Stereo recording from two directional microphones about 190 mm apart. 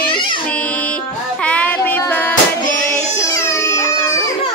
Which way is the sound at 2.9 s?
15° left (ahead or behind).